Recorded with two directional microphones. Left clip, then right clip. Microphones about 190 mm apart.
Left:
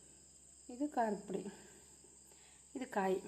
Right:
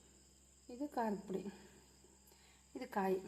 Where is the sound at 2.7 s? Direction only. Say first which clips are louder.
Left 2 dB; 10° left (ahead or behind).